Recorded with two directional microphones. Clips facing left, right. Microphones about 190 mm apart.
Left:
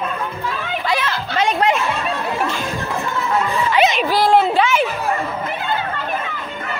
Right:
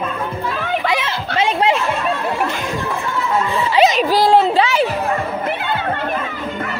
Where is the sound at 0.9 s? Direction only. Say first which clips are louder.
Right 1 dB; 25° right (ahead or behind).